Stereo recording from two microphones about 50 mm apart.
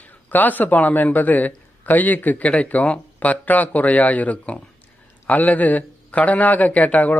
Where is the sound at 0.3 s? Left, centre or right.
Left.